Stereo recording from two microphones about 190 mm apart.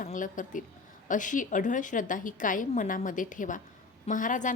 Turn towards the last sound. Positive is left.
turn(degrees=45)  # may be behind; listen again after turning